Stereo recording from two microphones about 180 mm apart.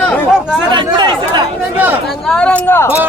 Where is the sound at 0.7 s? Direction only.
25° right (ahead or behind).